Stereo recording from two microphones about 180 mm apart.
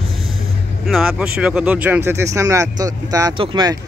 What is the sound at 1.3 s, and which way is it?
Speech, 5° right (ahead or behind).